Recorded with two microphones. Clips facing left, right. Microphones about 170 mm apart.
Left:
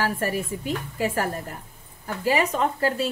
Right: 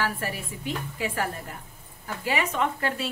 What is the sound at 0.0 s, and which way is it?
A woman's voice, 45° left (ahead or behind).